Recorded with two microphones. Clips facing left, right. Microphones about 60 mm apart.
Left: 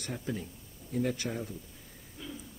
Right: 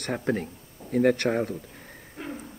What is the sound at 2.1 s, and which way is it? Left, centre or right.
Hoot, right.